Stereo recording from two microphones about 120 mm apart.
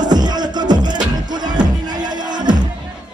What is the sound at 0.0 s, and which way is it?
Music, 35° right (ahead or behind).